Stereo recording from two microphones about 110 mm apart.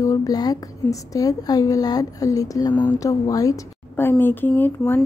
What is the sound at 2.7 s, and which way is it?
Speech, 15° left (ahead or behind).